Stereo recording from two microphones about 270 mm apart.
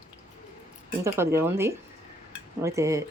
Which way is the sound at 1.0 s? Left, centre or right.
Centre.